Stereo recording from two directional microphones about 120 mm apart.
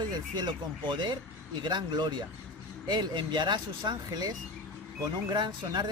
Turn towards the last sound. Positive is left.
turn(degrees=-35)  # may be behind; listen again after turning